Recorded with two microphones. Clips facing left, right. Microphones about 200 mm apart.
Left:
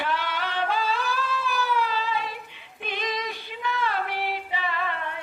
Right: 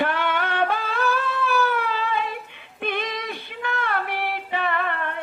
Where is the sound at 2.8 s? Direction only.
55° right (ahead or behind).